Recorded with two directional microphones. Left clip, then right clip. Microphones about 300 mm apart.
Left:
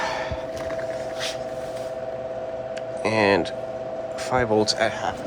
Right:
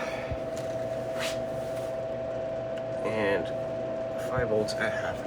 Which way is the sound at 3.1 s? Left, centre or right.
Centre.